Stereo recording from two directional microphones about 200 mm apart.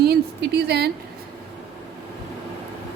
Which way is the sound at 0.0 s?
55° right (ahead or behind).